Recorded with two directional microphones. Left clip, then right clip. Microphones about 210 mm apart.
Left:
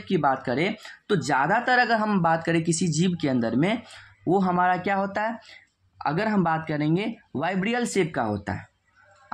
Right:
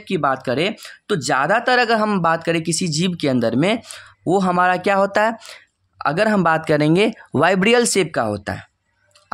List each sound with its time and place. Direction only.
0.0 s speech: 30° right (ahead or behind)